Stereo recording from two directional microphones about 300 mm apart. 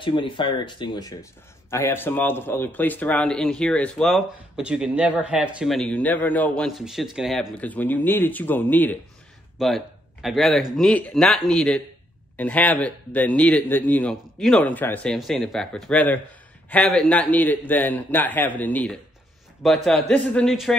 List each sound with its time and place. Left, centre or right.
0.0 s a man's voice: centre